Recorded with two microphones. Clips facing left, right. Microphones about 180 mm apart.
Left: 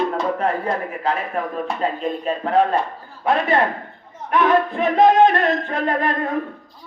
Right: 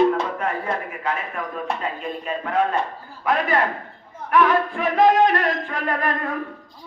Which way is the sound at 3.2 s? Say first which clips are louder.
Left 3 dB; 25° left (ahead or behind).